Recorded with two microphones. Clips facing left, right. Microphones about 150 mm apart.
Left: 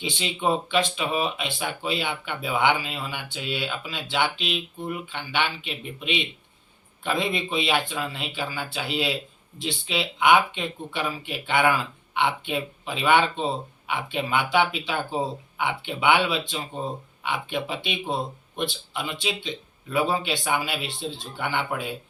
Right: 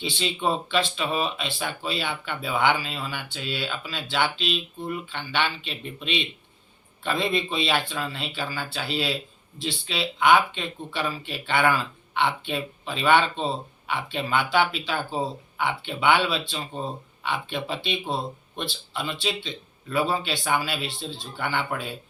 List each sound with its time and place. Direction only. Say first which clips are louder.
0.0 s speech: even; 15° left (ahead or behind)